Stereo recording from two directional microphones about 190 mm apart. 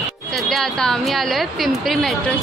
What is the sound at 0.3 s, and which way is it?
A woman's voice, centre (ahead or behind).